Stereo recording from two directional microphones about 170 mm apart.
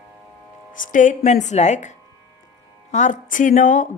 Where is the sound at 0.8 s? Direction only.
50° left (ahead or behind).